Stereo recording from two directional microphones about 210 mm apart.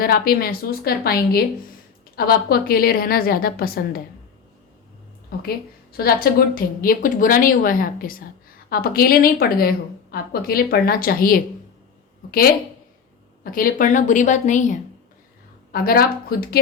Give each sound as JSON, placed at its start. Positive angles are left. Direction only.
{"t": 0.0, "sound": "a woman's voice", "side_deg": 45}
{"t": 6.0, "sound": "a woman's voice", "side_deg": 45}
{"t": 13.4, "sound": "a woman's voice", "side_deg": 45}